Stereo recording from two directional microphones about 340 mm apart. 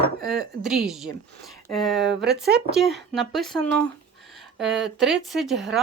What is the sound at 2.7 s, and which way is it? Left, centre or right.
Speech, centre.